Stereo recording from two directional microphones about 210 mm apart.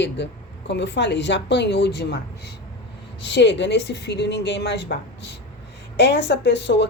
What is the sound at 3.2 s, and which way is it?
A woman's voice, 55° left (ahead or behind).